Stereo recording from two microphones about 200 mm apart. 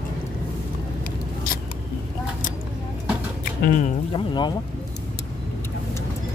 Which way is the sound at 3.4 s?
45° left (ahead or behind).